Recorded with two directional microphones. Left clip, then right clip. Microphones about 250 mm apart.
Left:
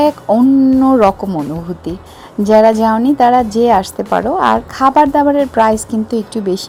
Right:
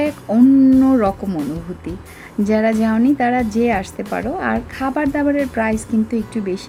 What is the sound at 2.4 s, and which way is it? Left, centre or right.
A woman's voice, centre.